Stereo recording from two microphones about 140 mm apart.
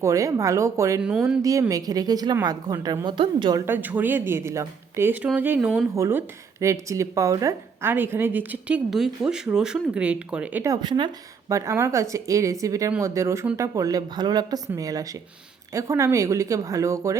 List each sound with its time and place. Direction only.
0.0 s a woman's voice: 25° right (ahead or behind)
3.7 s speech: 15° right (ahead or behind)
5.9 s speech: 20° right (ahead or behind)
10.6 s a woman's voice: 25° right (ahead or behind)
11.4 s speech: 20° right (ahead or behind)